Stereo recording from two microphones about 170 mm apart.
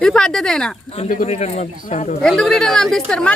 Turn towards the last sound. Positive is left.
turn(degrees=5)  # may be behind; listen again after turning